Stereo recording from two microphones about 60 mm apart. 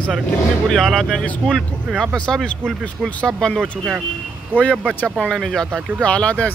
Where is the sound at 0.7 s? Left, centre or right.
Centre.